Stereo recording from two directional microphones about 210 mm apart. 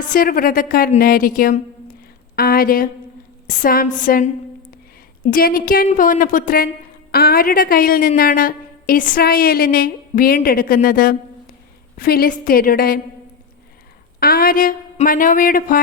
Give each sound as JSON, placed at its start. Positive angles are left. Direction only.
{"t": 0.1, "sound": "a woman's voice", "side_deg": 40}
{"t": 14.2, "sound": "speech", "side_deg": 45}